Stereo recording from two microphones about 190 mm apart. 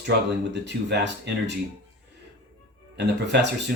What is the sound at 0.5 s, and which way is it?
Speech, 65° right (ahead or behind).